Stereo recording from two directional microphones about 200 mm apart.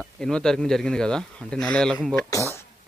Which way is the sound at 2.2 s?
15° left (ahead or behind).